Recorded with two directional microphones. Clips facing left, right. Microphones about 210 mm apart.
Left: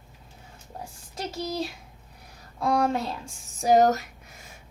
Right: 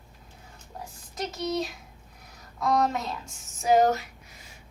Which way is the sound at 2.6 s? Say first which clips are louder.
Left 1 dB; 30° left (ahead or behind).